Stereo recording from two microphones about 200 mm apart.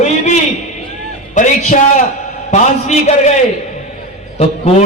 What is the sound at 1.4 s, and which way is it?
A man's voice, 40° left (ahead or behind).